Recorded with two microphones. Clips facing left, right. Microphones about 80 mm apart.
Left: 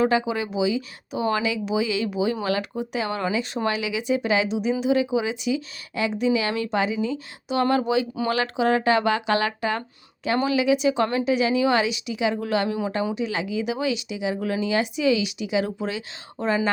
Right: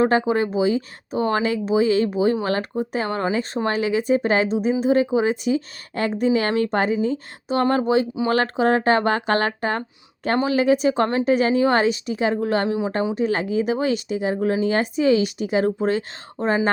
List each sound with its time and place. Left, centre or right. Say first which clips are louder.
0.0 s speech: right 4 dB; right
13.1 s speech: right 5 dB; right